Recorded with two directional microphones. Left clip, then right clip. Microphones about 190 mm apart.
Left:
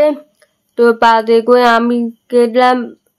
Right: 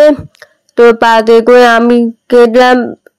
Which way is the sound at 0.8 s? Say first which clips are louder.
Right 4 dB; 30° right (ahead or behind).